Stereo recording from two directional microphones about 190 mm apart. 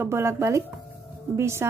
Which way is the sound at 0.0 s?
15° right (ahead or behind).